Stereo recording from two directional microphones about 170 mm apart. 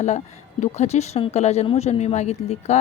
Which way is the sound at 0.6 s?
40° left (ahead or behind).